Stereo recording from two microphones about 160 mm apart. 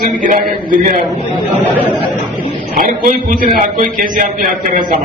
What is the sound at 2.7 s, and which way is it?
A man's voice, 60° right (ahead or behind).